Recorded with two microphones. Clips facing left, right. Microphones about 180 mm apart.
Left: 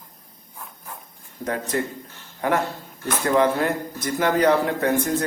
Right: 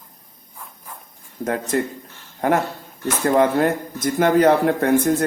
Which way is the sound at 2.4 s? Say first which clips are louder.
Right 3 dB; 45° right (ahead or behind).